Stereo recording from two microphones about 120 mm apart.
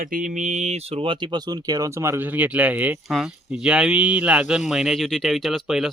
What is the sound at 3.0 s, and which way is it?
Speech, centre (ahead or behind).